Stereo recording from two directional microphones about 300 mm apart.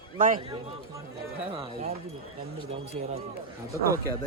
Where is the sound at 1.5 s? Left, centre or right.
Centre.